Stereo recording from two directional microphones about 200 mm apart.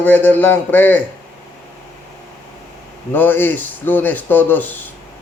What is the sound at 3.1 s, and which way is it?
Speech, 10° left (ahead or behind).